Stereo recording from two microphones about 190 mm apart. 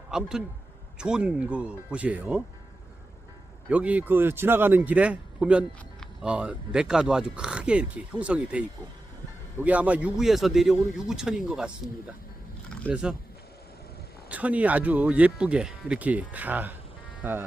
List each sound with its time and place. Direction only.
0.1 s a man's voice: 5° right (ahead or behind)
3.7 s a man's voice: 5° right (ahead or behind)
12.9 s a man's voice: 5° right (ahead or behind)
14.3 s speech: 10° right (ahead or behind)